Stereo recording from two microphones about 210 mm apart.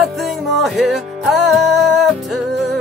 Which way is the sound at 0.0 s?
Centre (ahead or behind).